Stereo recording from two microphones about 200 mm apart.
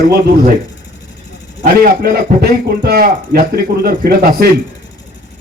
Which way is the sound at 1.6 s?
50° right (ahead or behind).